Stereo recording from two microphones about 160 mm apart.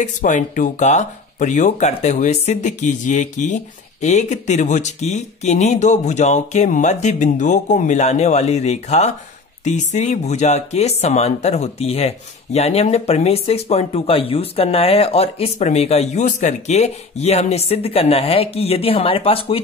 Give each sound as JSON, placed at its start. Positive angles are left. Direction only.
{"t": 0.0, "sound": "speech", "side_deg": 50}